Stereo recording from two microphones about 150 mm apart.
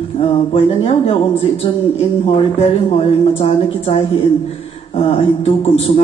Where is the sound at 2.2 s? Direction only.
40° left (ahead or behind).